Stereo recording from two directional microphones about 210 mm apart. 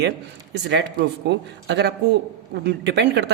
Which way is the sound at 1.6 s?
55° right (ahead or behind).